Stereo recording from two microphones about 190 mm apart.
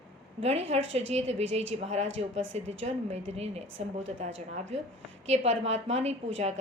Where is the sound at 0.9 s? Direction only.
35° right (ahead or behind).